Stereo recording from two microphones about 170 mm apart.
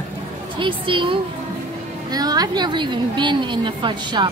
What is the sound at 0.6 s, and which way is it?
A woman's voice, 30° right (ahead or behind).